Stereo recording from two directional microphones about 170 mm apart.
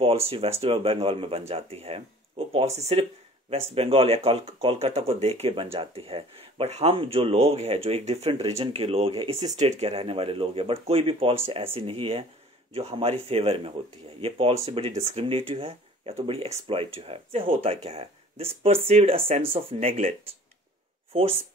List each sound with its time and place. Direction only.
0.0 s speech: 35° right (ahead or behind)